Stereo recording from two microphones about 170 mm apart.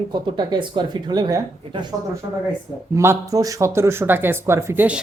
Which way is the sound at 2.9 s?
15° right (ahead or behind).